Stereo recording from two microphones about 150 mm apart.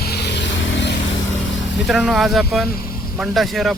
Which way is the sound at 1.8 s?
Centre (ahead or behind).